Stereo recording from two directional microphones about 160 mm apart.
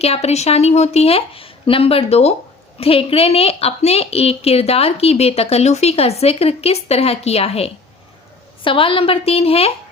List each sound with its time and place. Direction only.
0.0 s a woman's voice: 40° left (ahead or behind)